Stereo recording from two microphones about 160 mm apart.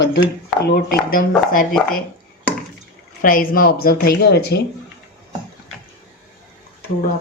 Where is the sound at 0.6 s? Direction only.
65° left (ahead or behind).